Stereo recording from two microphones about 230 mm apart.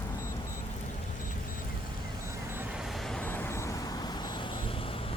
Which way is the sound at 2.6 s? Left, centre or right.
Centre.